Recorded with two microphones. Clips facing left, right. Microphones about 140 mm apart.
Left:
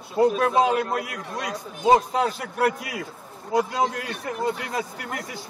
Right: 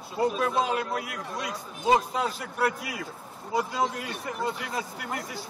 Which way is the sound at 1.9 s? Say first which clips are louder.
Left 5 dB; 60° left (ahead or behind).